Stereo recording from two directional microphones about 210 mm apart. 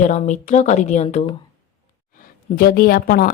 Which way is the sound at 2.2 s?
45° left (ahead or behind).